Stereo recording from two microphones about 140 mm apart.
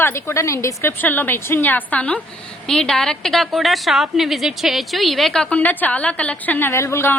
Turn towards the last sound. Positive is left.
turn(degrees=20)  # may be behind; listen again after turning